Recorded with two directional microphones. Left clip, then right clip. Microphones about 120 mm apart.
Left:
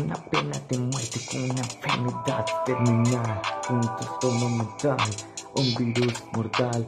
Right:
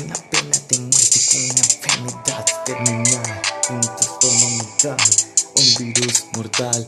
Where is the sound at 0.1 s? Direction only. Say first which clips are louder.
Right 8 dB; 25° right (ahead or behind).